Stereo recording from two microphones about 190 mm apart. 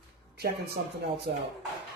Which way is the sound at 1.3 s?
55° right (ahead or behind).